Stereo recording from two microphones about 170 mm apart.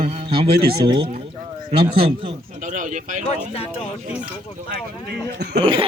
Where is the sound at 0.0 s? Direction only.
35° right (ahead or behind).